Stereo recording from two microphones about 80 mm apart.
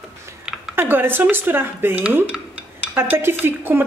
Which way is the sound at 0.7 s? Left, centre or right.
Right.